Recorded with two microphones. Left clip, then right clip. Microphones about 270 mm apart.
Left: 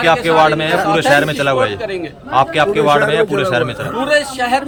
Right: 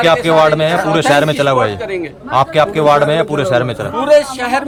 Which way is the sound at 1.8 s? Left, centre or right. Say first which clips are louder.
Right 1 dB; centre.